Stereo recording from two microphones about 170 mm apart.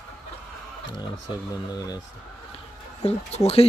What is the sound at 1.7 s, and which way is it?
Speech, 25° left (ahead or behind).